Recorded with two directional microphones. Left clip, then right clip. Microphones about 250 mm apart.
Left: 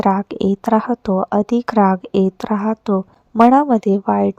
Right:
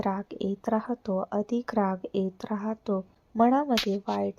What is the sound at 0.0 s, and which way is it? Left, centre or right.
Speech, left.